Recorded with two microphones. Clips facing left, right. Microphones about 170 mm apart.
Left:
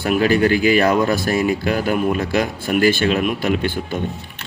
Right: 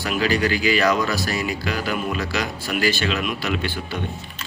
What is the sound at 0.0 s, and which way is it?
Speech, 55° left (ahead or behind).